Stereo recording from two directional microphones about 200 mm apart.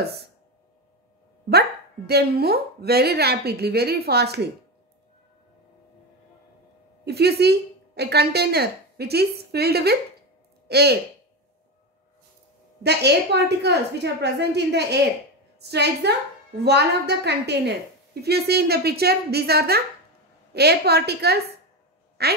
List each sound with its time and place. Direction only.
0.0 s speech: 55° right (ahead or behind)
2.0 s speech: 50° right (ahead or behind)
7.1 s speech: 55° right (ahead or behind)
12.8 s a woman's voice: 55° right (ahead or behind)